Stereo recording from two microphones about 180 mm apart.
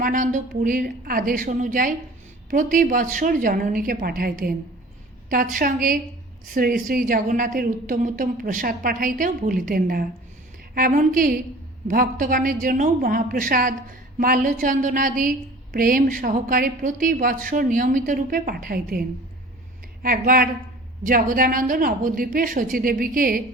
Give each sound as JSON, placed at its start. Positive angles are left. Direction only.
{"t": 0.0, "sound": "a woman's voice", "side_deg": -45}